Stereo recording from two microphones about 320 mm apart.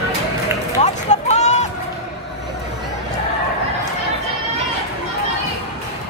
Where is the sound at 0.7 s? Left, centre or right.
Left.